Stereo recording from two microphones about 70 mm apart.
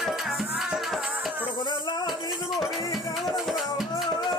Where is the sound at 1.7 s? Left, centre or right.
Left.